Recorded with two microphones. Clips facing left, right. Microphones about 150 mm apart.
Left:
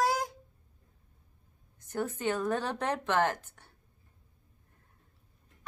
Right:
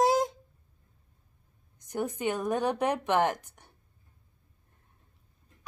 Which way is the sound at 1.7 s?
15° right (ahead or behind).